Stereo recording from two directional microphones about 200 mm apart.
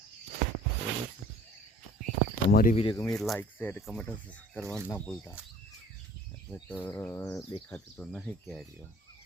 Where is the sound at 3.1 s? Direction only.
Centre (ahead or behind).